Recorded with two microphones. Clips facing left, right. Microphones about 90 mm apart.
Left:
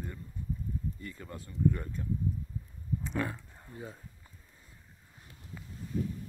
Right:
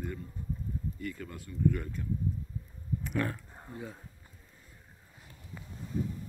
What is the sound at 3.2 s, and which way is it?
Speech, 10° left (ahead or behind).